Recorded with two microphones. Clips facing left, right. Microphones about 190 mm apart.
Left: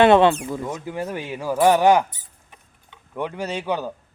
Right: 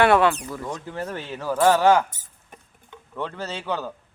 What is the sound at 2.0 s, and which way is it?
Rodents, 45° right (ahead or behind).